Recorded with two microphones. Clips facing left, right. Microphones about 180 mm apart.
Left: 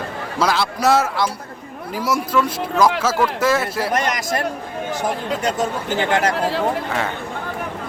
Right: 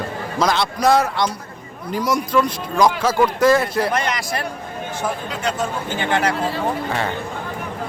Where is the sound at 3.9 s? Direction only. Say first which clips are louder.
Left 2 dB; 45° left (ahead or behind).